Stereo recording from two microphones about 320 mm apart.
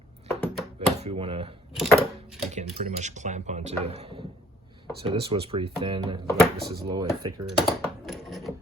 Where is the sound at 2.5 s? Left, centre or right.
Right.